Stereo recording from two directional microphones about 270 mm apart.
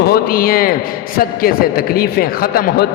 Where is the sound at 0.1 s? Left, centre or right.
Left.